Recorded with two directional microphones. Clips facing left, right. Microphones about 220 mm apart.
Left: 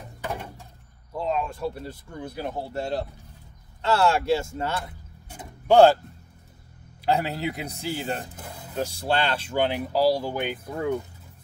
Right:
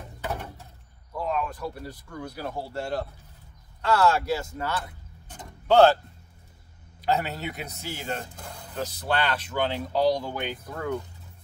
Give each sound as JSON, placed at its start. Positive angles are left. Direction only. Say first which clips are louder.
{"t": 0.2, "sound": "a sound", "louder": "even", "side_deg": 15}
{"t": 1.1, "sound": "speech", "louder": "left 2 dB", "side_deg": 25}
{"t": 5.3, "sound": "vehicle", "louder": "left 2 dB", "side_deg": 10}
{"t": 7.0, "sound": "a man's voice", "louder": "left 2 dB", "side_deg": 30}
{"t": 8.4, "sound": "music", "louder": "left 2 dB", "side_deg": 5}
{"t": 8.7, "sound": "speech", "louder": "left 4 dB", "side_deg": 10}
{"t": 9.0, "sound": "speech", "louder": "left 1 dB", "side_deg": 30}
{"t": 9.7, "sound": "speech", "louder": "left 1 dB", "side_deg": 10}